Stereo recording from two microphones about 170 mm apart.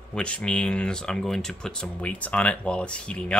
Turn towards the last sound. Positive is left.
turn(degrees=5)  # may be behind; listen again after turning